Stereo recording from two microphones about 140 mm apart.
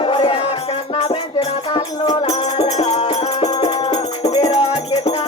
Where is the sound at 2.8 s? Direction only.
50° left (ahead or behind).